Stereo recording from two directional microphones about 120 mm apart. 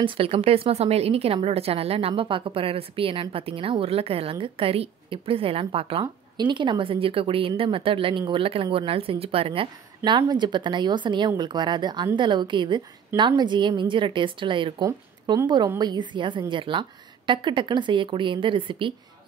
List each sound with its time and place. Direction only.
0.0 s a woman's voice: 55° right (ahead or behind)
6.3 s a woman's voice: 40° right (ahead or behind)
14.8 s a woman's voice: 30° right (ahead or behind)